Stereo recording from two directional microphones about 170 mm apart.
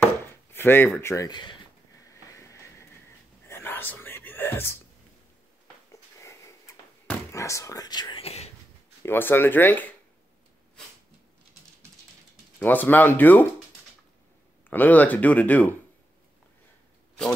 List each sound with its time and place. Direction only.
0.3 s chopping: 15° left (ahead or behind)
0.8 s speech: 10° left (ahead or behind)
2.3 s a sound: 15° left (ahead or behind)
3.4 s whispering: 15° left (ahead or behind)
6.1 s door: 20° left (ahead or behind); by 8.5 s 35° left (ahead or behind)
9.0 s speech: 10° left (ahead or behind)
12.5 s speech: 10° left (ahead or behind)
14.7 s speech: 10° left (ahead or behind)